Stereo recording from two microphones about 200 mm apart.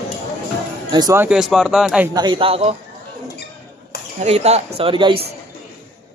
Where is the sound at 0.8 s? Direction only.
20° right (ahead or behind); by 2.1 s 5° right (ahead or behind).